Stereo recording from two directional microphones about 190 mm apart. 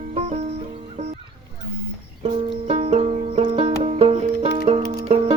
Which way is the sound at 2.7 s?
30° right (ahead or behind).